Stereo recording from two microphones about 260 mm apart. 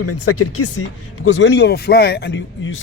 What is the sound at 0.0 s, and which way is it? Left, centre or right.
Speech, left.